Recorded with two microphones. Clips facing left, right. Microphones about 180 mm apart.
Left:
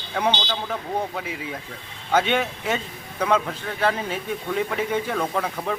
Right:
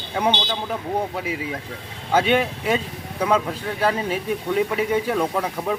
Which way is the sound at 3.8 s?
10° right (ahead or behind).